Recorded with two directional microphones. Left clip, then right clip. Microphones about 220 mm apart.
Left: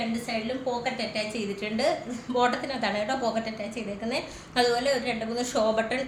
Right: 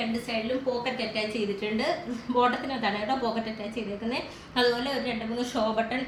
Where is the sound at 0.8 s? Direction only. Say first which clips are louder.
Even; 20° left (ahead or behind).